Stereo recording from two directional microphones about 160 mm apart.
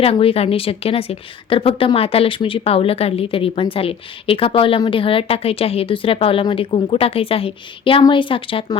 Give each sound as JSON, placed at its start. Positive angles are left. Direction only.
{"t": 0.0, "sound": "a woman's voice", "side_deg": 35}